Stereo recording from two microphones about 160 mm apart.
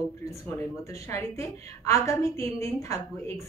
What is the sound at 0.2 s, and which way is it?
A woman's voice, 20° left (ahead or behind).